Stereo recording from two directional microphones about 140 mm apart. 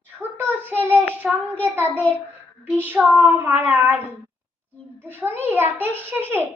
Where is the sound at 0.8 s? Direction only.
10° left (ahead or behind).